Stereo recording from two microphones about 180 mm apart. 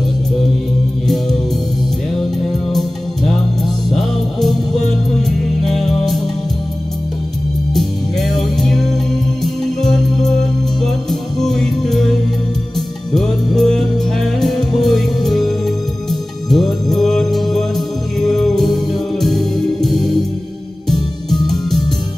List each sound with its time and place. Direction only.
3.6 s music: centre (ahead or behind)
7.7 s music: centre (ahead or behind)